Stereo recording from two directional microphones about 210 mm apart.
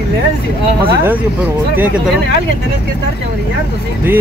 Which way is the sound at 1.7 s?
5° right (ahead or behind).